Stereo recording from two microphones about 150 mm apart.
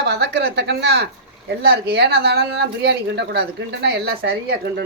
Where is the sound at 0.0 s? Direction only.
90° right.